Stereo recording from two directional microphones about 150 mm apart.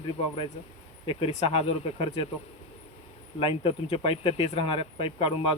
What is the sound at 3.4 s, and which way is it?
Speech, 40° left (ahead or behind).